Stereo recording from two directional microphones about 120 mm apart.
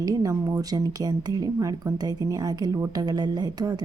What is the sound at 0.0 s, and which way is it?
Speech, 30° right (ahead or behind).